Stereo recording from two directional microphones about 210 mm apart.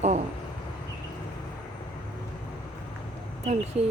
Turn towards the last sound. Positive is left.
turn(degrees=-30)  # may be behind; listen again after turning